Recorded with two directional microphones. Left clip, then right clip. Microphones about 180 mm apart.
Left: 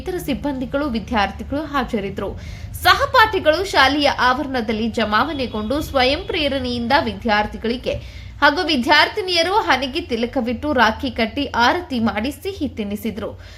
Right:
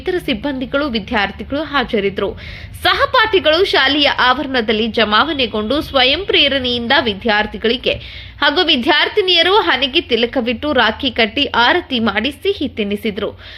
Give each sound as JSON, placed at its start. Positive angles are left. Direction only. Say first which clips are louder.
{"t": 0.0, "sound": "a woman's voice", "louder": "right 5 dB", "side_deg": -15}